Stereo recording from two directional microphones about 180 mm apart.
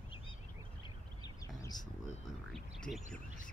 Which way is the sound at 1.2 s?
20° left (ahead or behind).